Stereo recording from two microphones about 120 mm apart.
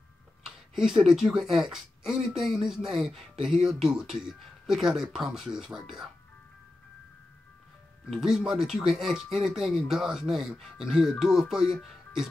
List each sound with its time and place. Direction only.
0.7 s speech: 5° right (ahead or behind)
8.1 s speech: 5° right (ahead or behind)